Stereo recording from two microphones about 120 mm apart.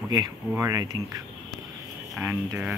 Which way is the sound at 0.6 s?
30° right (ahead or behind).